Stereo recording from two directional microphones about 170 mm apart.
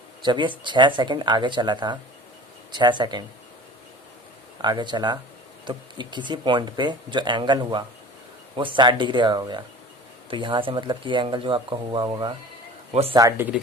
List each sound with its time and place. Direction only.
0.2 s speech: 30° right (ahead or behind)
4.6 s speech: 25° right (ahead or behind)
12.9 s a man's voice: 35° right (ahead or behind)
13.1 s speech: 15° right (ahead or behind)